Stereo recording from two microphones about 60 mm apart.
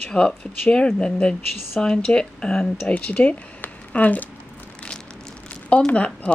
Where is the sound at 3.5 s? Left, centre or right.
Left.